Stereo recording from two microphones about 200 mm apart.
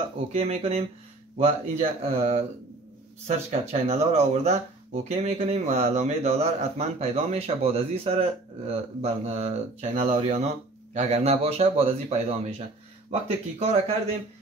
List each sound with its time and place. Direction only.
0.3 s speech: 30° right (ahead or behind)